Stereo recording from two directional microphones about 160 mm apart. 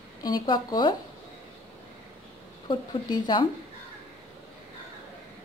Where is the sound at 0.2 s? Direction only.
25° left (ahead or behind).